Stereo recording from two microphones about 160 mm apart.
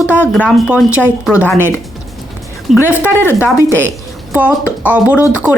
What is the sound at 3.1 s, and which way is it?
Speech, 15° left (ahead or behind).